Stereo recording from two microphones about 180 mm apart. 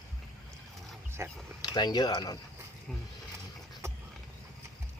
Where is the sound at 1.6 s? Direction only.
25° left (ahead or behind).